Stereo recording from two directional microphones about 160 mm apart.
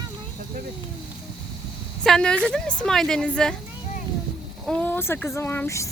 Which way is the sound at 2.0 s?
5° left (ahead or behind).